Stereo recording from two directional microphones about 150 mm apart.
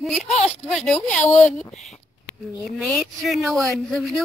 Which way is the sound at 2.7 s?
Centre (ahead or behind).